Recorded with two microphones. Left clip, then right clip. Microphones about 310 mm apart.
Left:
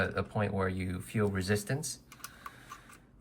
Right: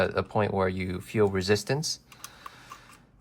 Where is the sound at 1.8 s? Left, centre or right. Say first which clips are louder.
Right 9 dB; centre.